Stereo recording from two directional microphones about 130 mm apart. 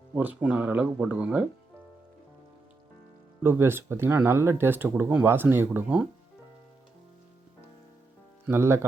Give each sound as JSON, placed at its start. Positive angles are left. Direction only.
{"t": 0.1, "sound": "speech", "side_deg": -15}
{"t": 3.4, "sound": "speech", "side_deg": -20}
{"t": 8.4, "sound": "speech", "side_deg": -20}